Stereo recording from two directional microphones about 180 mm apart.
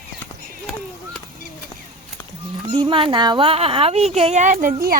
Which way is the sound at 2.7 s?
30° right (ahead or behind).